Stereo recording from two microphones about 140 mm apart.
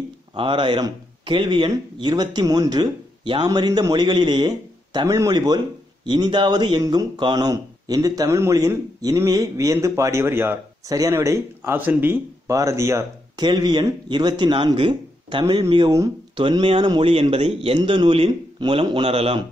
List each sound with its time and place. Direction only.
0.3 s speech: 35° right (ahead or behind); by 13.0 s 20° right (ahead or behind)
13.4 s speech: 30° right (ahead or behind)